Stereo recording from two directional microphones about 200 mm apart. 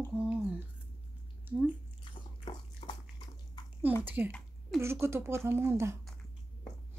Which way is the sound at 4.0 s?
10° right (ahead or behind).